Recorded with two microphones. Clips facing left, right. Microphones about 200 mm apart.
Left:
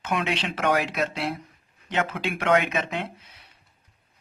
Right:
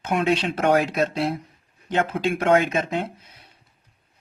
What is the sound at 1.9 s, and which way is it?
Speech, 30° right (ahead or behind).